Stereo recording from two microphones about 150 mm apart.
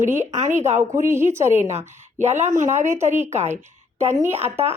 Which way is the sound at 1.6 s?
55° right (ahead or behind).